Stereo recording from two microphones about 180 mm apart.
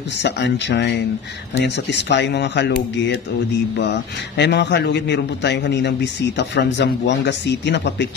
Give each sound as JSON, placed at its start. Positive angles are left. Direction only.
{"t": 0.2, "sound": "a man's voice", "side_deg": 70}